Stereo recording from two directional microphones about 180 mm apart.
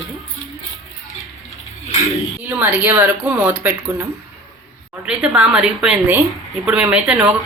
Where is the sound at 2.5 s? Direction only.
10° right (ahead or behind).